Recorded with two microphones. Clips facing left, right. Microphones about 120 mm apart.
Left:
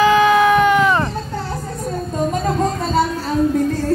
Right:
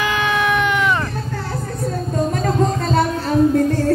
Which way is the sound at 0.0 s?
40° left (ahead or behind).